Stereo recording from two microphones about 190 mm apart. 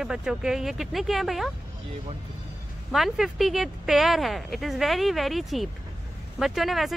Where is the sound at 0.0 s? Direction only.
5° right (ahead or behind).